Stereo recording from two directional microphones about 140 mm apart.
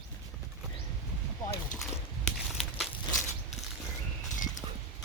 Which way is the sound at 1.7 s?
65° left (ahead or behind).